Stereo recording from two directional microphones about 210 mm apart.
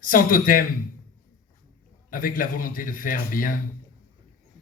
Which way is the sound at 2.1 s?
40° left (ahead or behind).